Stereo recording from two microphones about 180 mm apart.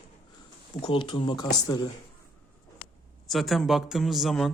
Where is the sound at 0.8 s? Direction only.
30° left (ahead or behind).